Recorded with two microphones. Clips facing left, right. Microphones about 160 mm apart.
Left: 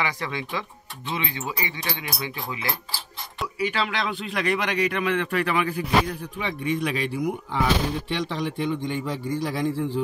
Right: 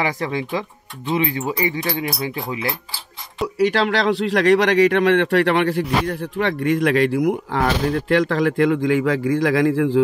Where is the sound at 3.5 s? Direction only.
80° right.